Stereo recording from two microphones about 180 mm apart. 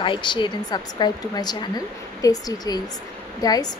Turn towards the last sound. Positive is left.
turn(degrees=20)  # may be behind; listen again after turning